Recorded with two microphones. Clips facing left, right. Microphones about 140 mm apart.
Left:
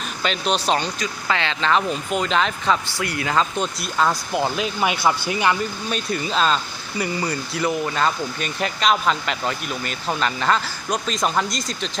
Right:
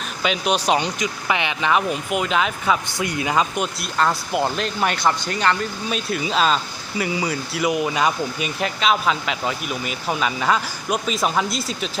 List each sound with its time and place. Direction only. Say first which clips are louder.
0.2 s speech: right 2 dB; 10° right (ahead or behind)
3.0 s speech: right 1 dB; 20° right (ahead or behind)
3.8 s speech: even; centre (ahead or behind)
5.9 s speech: right 2 dB; 5° right (ahead or behind)